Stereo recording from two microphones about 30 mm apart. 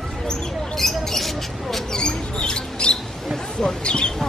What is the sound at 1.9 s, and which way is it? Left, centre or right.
Mouse, left.